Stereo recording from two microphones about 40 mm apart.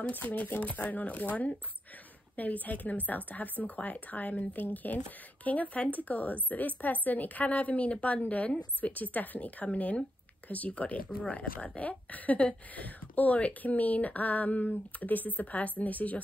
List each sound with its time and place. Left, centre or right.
0.1 s speech: left
4.6 s speech: left